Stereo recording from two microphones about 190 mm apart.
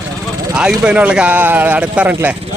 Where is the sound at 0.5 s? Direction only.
5° right (ahead or behind).